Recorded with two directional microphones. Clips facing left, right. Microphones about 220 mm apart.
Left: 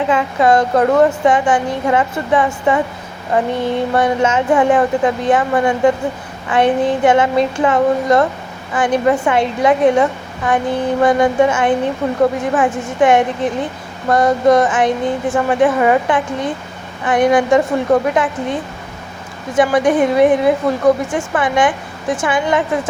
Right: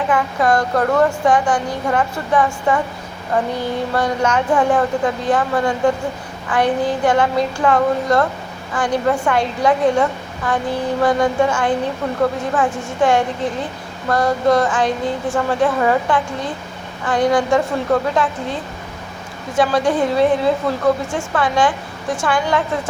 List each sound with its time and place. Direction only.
0.1 s a woman's voice: 20° left (ahead or behind)
19.5 s a woman's voice: 20° left (ahead or behind)